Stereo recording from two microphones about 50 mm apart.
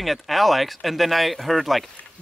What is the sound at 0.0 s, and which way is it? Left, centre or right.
Speech, centre.